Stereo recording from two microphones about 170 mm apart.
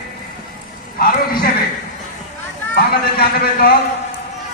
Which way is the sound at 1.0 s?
60° left (ahead or behind).